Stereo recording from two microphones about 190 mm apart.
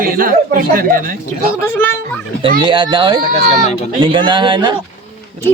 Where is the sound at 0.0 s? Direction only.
45° right (ahead or behind).